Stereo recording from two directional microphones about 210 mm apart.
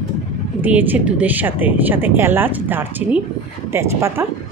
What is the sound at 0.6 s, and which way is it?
Speech, 10° right (ahead or behind).